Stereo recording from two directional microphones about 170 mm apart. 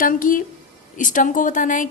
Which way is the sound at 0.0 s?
55° left (ahead or behind).